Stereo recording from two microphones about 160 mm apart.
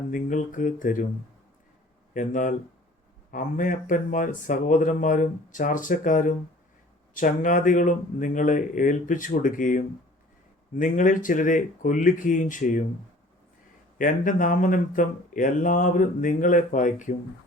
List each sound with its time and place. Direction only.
0.1 s speech: 55° left (ahead or behind)
2.1 s speech: 55° left (ahead or behind)
14.0 s speech: 55° left (ahead or behind)